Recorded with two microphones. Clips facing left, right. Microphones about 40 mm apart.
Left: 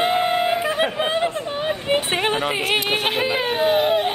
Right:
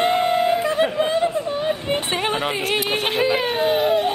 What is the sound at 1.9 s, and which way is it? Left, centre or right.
Speech, centre.